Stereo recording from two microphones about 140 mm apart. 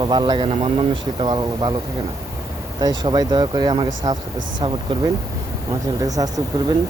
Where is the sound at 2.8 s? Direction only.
30° right (ahead or behind).